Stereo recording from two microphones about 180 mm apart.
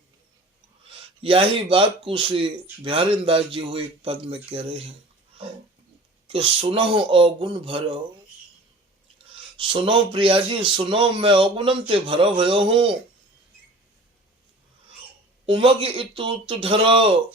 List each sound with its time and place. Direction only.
1.2 s speech: 30° right (ahead or behind)
6.2 s speech: 30° right (ahead or behind)
9.6 s speech: 30° right (ahead or behind)
15.4 s speech: 30° right (ahead or behind)